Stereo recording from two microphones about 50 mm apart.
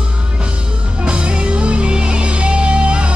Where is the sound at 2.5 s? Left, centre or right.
Right.